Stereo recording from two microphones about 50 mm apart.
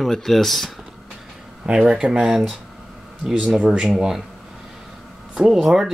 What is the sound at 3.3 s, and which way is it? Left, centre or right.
Speech, right.